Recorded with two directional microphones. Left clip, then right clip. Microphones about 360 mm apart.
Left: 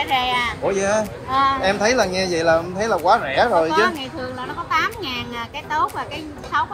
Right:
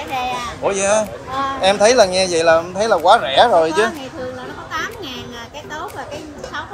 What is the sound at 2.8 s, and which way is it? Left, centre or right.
Speech, centre.